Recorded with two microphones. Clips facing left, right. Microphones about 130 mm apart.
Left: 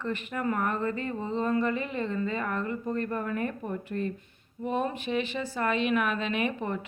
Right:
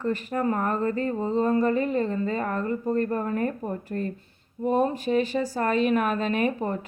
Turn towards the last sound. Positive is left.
turn(degrees=-40)  # may be behind; listen again after turning